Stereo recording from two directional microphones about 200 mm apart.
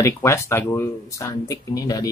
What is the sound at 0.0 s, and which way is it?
Speech, 15° left (ahead or behind).